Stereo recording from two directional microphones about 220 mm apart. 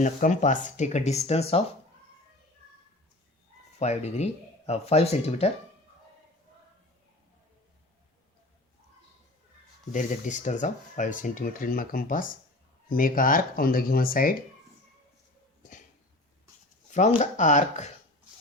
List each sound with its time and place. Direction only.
0.0 s speech: 35° left (ahead or behind)
3.8 s speech: 30° left (ahead or behind)
9.9 s speech: 35° left (ahead or behind)
17.2 s speech: 35° left (ahead or behind)